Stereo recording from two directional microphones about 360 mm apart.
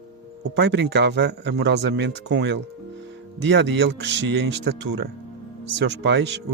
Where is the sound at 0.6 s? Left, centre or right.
Right.